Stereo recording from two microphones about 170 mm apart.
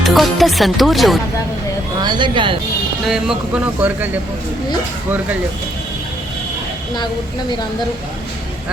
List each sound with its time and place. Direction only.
0.0 s speech: centre (ahead or behind)
2.0 s speech: 25° right (ahead or behind)
3.1 s speech: 5° right (ahead or behind)